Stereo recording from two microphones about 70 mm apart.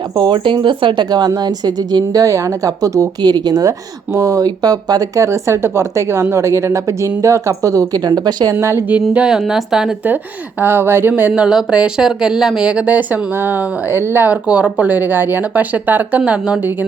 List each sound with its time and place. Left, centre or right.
0.2 s a woman's voice: right
2.2 s a woman's voice: right
3.2 s speech: right
4.4 s speech: right
5.2 s a woman's voice: right
8.9 s speech: centre
10.6 s speech: right
11.3 s speech: centre